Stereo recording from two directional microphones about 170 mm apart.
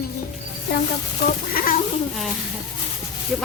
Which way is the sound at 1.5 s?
60° left (ahead or behind).